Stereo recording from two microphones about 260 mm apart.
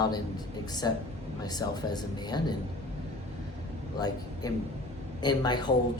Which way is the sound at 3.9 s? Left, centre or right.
Centre.